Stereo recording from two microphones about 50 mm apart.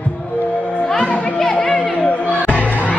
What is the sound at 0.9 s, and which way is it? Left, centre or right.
Music, centre.